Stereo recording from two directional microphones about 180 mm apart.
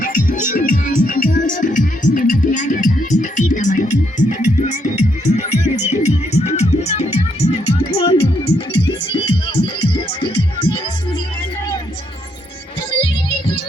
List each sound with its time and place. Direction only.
0.0 s music: 45° left (ahead or behind); by 10.8 s 30° left (ahead or behind)